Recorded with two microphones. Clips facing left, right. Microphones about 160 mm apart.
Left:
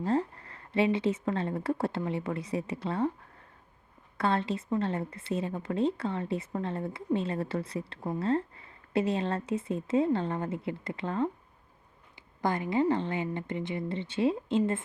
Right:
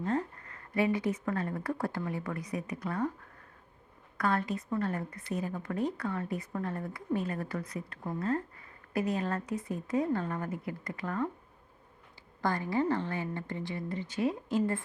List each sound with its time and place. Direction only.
0.0 s a woman's voice: 30° left (ahead or behind)
4.2 s a woman's voice: 25° left (ahead or behind)
12.4 s a woman's voice: 20° left (ahead or behind)